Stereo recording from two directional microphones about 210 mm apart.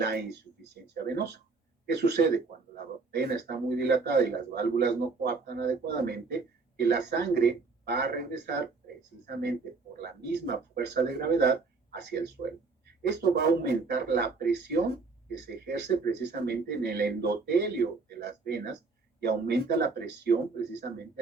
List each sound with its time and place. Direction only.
0.0 s a man's voice: 50° right (ahead or behind)